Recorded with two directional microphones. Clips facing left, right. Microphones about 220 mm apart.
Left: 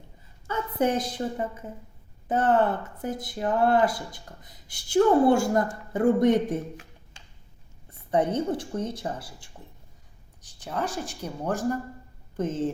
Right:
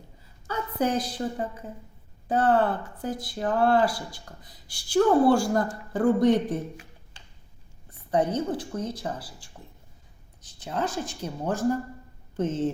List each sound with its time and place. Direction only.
0.4 s a woman's voice: 25° left (ahead or behind)
8.1 s speech: 25° left (ahead or behind)
10.4 s a sound: 15° left (ahead or behind)
10.8 s speech: 10° left (ahead or behind)